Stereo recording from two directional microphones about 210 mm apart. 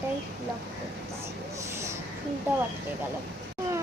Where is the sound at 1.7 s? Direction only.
15° right (ahead or behind).